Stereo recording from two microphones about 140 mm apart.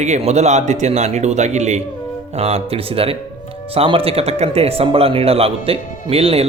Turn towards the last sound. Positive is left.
turn(degrees=-45)  # may be behind; listen again after turning